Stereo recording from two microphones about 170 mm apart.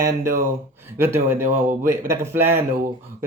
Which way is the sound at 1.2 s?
15° right (ahead or behind).